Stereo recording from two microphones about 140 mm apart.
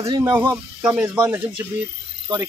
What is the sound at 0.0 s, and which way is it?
Speech, 20° right (ahead or behind).